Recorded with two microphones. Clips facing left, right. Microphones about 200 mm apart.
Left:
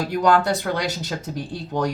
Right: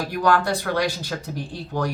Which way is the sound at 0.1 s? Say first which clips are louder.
Left 2 dB; 20° left (ahead or behind).